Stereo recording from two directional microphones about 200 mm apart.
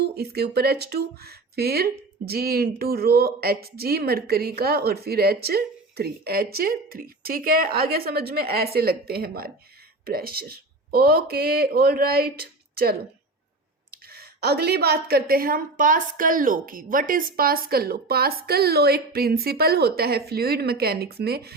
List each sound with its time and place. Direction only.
0.2 s speech: 55° right (ahead or behind)